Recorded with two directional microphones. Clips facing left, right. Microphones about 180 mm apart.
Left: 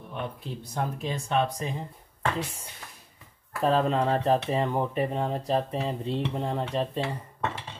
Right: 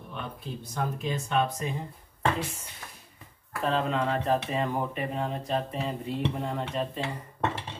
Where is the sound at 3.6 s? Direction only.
35° left (ahead or behind).